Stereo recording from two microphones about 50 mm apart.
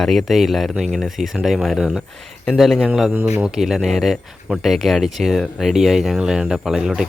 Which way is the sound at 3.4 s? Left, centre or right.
Centre.